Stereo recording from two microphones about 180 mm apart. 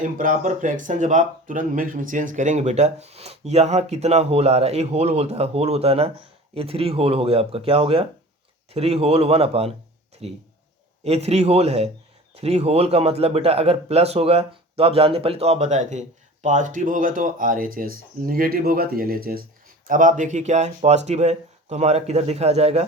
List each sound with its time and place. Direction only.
0.0 s a man's voice: 45° right (ahead or behind)